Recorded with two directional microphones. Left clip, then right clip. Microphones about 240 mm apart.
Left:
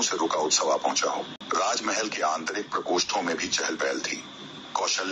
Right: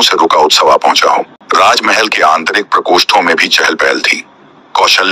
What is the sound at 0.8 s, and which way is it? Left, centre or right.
Speech, right.